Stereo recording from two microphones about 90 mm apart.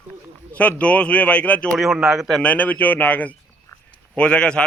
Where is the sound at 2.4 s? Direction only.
15° left (ahead or behind).